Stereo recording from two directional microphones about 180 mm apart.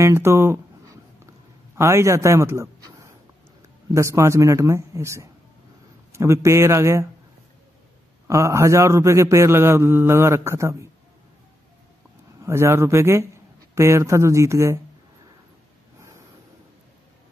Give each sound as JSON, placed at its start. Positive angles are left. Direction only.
{"t": 0.0, "sound": "a sound", "side_deg": -15}
{"t": 1.8, "sound": "a man's voice", "side_deg": -15}
{"t": 8.3, "sound": "a man's voice", "side_deg": -15}
{"t": 12.4, "sound": "a man's voice", "side_deg": -15}